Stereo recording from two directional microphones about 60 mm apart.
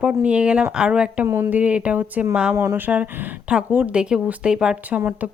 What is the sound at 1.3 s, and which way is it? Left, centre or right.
Speech, right.